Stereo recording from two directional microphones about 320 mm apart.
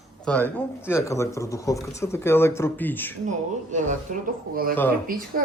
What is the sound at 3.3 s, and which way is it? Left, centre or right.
Speech, right.